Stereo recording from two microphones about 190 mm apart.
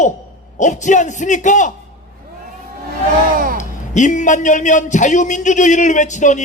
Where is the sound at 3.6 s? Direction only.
40° left (ahead or behind).